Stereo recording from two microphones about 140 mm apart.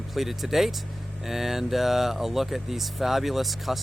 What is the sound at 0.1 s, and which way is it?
Speech, centre (ahead or behind).